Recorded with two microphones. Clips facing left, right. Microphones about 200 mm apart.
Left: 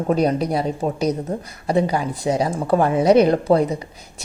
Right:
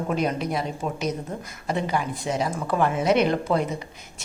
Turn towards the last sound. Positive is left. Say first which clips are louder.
# left 5 dB
turn(degrees=35)  # may be behind; listen again after turning